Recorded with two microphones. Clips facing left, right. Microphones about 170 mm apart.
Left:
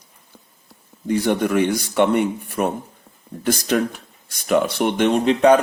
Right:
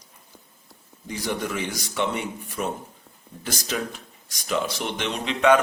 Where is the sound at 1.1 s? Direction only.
60° left (ahead or behind).